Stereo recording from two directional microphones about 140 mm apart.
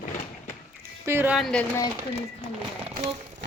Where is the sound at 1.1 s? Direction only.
15° right (ahead or behind).